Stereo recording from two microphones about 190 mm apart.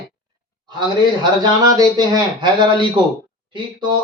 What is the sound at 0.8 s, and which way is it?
Speech, 20° right (ahead or behind).